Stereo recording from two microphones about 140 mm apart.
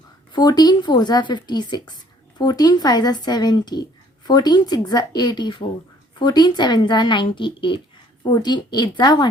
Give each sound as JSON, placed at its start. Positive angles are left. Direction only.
{"t": 0.3, "sound": "a woman's voice", "side_deg": 30}